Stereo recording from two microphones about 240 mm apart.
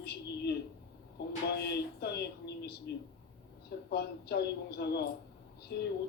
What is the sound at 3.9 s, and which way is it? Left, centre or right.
Speech, left.